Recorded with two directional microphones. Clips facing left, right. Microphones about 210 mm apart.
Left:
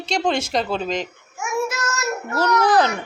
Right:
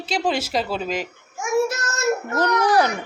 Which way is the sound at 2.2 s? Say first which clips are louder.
Left 5 dB; 15° right (ahead or behind).